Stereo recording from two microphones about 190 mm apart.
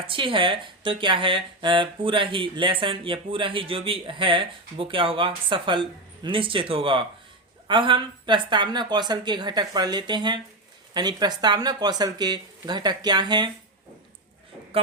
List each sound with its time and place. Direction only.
0.1 s speech: 25° right (ahead or behind)